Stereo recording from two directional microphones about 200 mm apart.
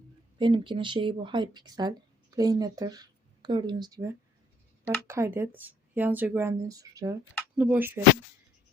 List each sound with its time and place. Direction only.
0.3 s speech: 25° right (ahead or behind)